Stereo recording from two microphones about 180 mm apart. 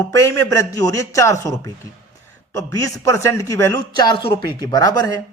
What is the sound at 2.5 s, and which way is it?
Speech, 15° left (ahead or behind).